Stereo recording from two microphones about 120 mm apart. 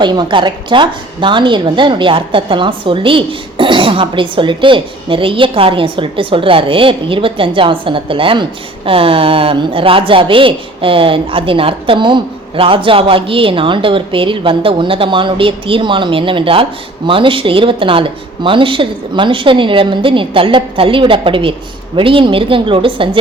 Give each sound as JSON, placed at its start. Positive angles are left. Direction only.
{"t": 0.0, "sound": "a woman's voice", "side_deg": -40}